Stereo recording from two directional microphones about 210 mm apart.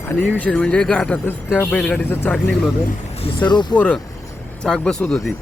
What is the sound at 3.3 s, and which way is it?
Speech, 20° left (ahead or behind).